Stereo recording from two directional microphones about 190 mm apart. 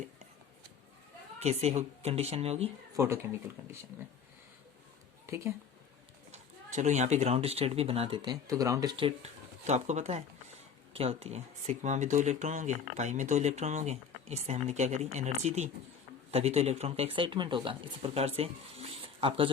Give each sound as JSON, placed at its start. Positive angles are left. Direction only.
{"t": 1.4, "sound": "speech", "side_deg": -35}
{"t": 2.9, "sound": "speech", "side_deg": -15}
{"t": 5.2, "sound": "a woman's voice", "side_deg": -15}
{"t": 6.3, "sound": "speech", "side_deg": -40}